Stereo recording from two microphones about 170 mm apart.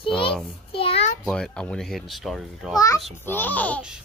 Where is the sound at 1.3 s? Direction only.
5° left (ahead or behind).